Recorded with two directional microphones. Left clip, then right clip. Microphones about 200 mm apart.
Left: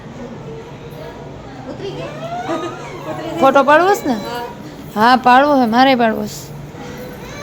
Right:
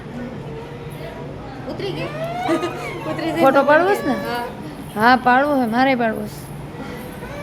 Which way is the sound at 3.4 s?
15° left (ahead or behind).